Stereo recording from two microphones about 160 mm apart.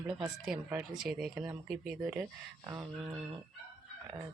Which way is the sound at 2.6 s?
25° right (ahead or behind).